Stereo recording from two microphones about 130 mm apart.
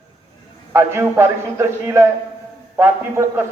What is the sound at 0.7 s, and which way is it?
A man's voice, 20° right (ahead or behind).